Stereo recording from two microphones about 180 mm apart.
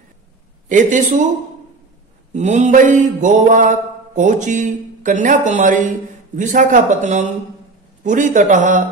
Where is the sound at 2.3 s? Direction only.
40° right (ahead or behind).